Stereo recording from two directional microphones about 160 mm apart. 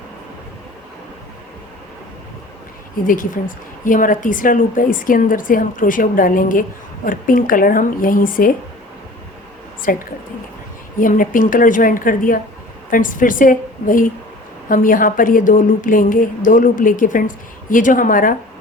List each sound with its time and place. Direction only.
3.1 s a woman's voice: 60° left (ahead or behind)
9.9 s a woman's voice: 60° left (ahead or behind)